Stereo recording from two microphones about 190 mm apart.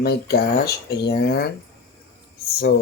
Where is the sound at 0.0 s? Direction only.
55° left (ahead or behind).